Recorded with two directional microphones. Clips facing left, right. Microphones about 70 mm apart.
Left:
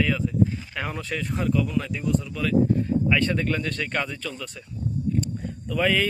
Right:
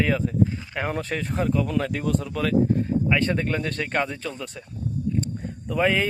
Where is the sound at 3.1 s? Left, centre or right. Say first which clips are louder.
Even; right.